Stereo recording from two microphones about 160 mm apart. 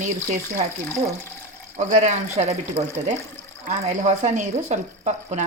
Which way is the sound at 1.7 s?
50° right (ahead or behind).